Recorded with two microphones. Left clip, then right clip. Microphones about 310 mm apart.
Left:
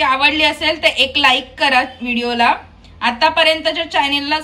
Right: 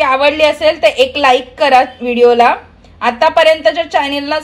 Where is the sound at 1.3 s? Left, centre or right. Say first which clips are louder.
Right 5 dB; left.